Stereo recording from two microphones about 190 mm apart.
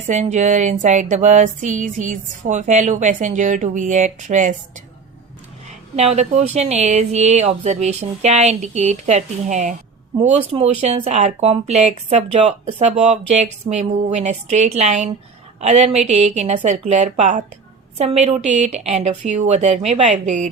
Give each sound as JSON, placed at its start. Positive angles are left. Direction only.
{"t": 0.1, "sound": "speech", "side_deg": -40}
{"t": 5.6, "sound": "speech", "side_deg": -35}